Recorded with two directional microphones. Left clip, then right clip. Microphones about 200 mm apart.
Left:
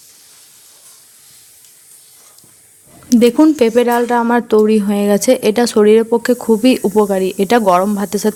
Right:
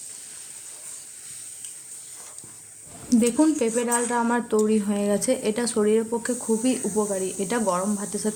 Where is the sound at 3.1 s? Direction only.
45° left (ahead or behind).